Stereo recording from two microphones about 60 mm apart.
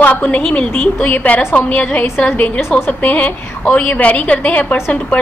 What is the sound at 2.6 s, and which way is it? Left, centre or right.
A woman's voice, left.